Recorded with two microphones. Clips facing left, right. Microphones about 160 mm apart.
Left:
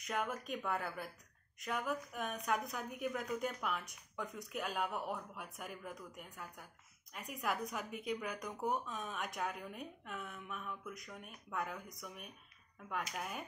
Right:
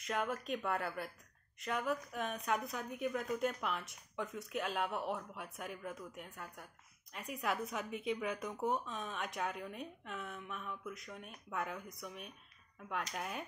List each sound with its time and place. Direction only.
0.0 s speech: 5° left (ahead or behind)
12.9 s speech: centre (ahead or behind)